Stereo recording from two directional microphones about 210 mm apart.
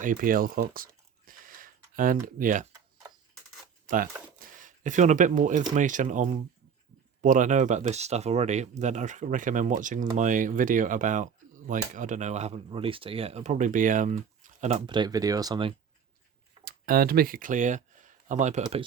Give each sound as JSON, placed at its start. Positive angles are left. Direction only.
{"t": 0.0, "sound": "speech", "side_deg": -40}
{"t": 1.3, "sound": "a sound", "side_deg": -40}
{"t": 2.2, "sound": "speech", "side_deg": -40}
{"t": 3.8, "sound": "speech", "side_deg": -40}
{"t": 16.6, "sound": "speech", "side_deg": -45}
{"t": 18.6, "sound": "speech", "side_deg": -25}